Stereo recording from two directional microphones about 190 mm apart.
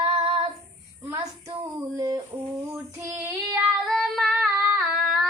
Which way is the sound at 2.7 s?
15° right (ahead or behind).